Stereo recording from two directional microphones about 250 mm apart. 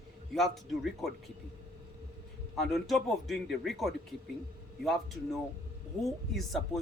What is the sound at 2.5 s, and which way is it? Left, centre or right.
Speech, centre.